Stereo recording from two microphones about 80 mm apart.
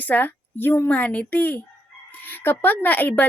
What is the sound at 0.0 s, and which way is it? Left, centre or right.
A woman's voice, left.